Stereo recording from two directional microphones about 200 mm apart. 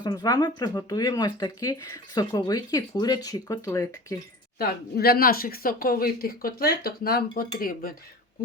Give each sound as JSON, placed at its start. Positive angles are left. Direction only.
{"t": 0.0, "sound": "speech", "side_deg": 20}
{"t": 4.5, "sound": "speech", "side_deg": 50}